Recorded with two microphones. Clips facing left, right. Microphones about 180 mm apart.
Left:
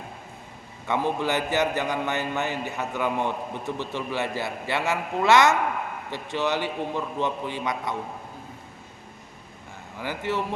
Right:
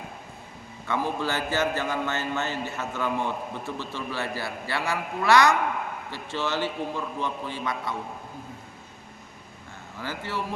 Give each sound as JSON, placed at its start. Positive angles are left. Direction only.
{"t": 0.9, "sound": "a man's voice", "side_deg": 20}
{"t": 10.0, "sound": "a man's voice", "side_deg": 20}